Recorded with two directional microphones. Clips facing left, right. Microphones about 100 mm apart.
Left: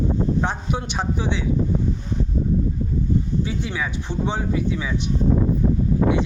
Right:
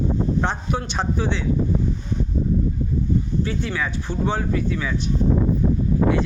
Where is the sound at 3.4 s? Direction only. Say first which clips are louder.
Right 1 dB; 10° left (ahead or behind).